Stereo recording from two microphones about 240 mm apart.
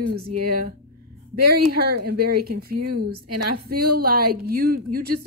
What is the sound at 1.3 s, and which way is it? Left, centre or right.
A woman's voice, right.